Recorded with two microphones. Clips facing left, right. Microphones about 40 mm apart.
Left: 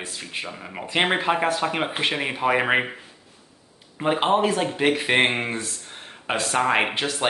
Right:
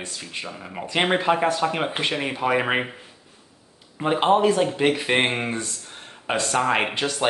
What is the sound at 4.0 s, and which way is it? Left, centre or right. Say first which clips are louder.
Speech: right 2 dB; centre.